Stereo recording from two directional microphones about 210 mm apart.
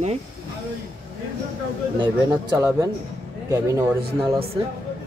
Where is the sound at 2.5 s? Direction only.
15° right (ahead or behind).